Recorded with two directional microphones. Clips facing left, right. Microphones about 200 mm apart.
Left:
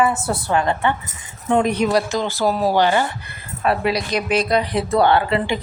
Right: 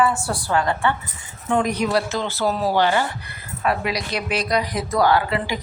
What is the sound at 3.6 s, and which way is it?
Speech, 30° left (ahead or behind).